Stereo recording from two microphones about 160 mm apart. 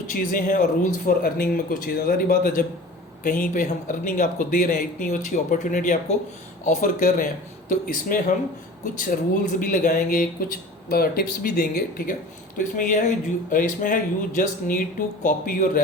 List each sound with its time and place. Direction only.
0.1 s speech: 60° left (ahead or behind)
9.6 s speech: 55° left (ahead or behind)
12.5 s speech: 55° left (ahead or behind)